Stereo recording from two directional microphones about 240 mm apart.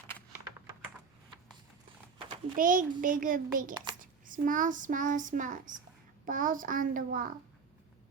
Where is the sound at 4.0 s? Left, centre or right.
Right.